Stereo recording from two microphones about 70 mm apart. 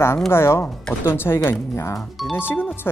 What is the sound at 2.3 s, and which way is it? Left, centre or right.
Speech, left.